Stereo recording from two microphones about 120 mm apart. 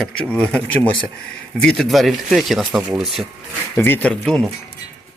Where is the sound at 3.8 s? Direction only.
20° left (ahead or behind).